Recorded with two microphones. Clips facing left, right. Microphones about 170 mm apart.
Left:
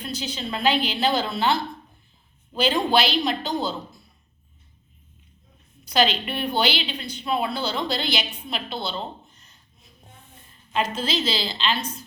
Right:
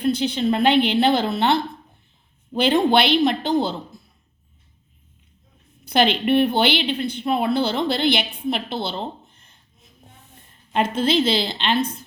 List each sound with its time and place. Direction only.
0.0 s a woman's voice: 60° right (ahead or behind)
2.9 s a woman's voice: 55° right (ahead or behind)
5.8 s a woman's voice: 55° right (ahead or behind)
9.3 s a sound: 55° right (ahead or behind)
10.7 s a woman's voice: 55° right (ahead or behind)